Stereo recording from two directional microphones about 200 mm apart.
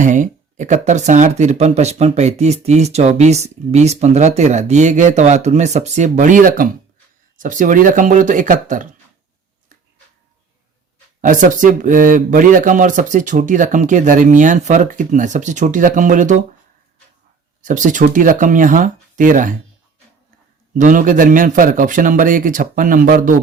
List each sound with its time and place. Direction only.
0.0 s speech: 40° right (ahead or behind)
11.2 s speech: 40° right (ahead or behind)
17.6 s speech: 40° right (ahead or behind)
20.7 s speech: 40° right (ahead or behind)